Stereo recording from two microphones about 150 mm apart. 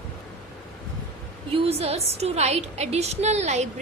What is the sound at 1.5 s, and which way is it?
A woman's voice, 40° right (ahead or behind).